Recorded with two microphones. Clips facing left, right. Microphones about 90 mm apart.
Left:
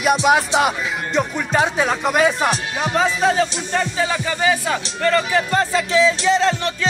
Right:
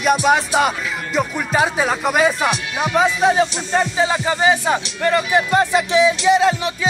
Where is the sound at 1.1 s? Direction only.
5° right (ahead or behind).